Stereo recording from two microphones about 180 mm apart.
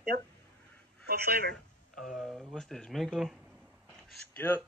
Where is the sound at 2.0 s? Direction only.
Centre (ahead or behind).